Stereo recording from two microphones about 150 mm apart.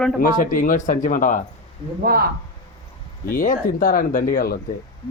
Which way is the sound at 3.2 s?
65° left (ahead or behind).